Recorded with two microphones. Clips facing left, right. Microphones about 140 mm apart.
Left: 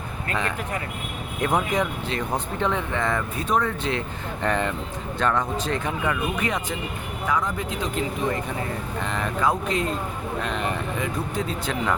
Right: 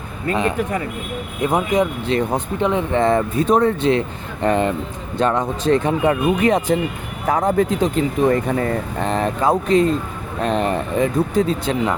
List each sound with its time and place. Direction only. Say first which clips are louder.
1.4 s speech: right 5 dB; 10° right (ahead or behind); by 6.6 s 35° right (ahead or behind)
7.3 s speech: right 9 dB; 45° right (ahead or behind)
9.0 s speech: right 5 dB; 35° right (ahead or behind)